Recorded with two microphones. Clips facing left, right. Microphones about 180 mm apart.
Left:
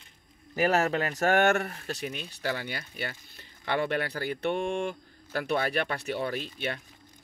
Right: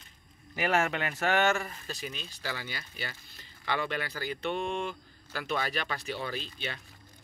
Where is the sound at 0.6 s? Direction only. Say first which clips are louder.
Left 4 dB; 40° left (ahead or behind).